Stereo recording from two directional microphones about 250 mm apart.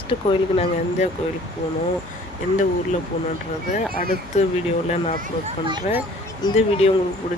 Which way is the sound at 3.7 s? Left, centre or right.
Left.